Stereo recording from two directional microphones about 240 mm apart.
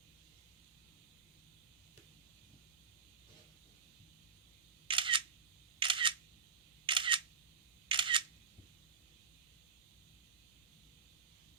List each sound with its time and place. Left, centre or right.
4.9 s single-lens reflex camera: right